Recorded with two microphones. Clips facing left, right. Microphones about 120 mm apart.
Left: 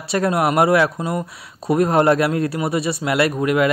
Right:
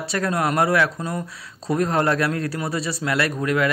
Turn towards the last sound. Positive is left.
turn(degrees=20)  # may be behind; listen again after turning